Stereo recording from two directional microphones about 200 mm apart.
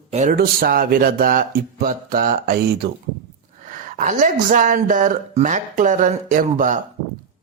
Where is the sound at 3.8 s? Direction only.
40° right (ahead or behind).